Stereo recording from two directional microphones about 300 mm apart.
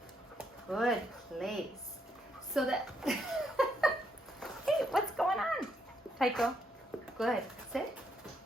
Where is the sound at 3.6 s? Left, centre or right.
Centre.